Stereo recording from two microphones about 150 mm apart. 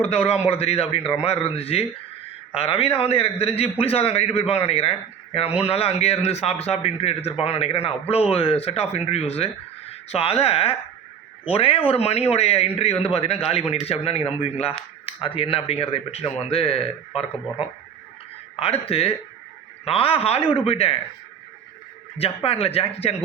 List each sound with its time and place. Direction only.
0.0 s a man's voice: 40° left (ahead or behind)
22.4 s a man's voice: 40° left (ahead or behind)